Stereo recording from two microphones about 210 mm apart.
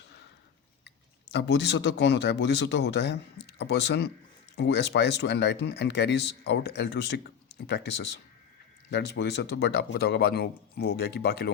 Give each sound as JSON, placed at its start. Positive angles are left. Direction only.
{"t": 0.9, "sound": "speech", "side_deg": 55}